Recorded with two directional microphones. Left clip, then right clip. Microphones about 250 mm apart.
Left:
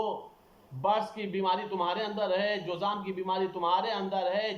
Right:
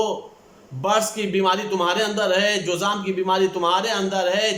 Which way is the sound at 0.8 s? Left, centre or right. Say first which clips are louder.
Right 8 dB; right.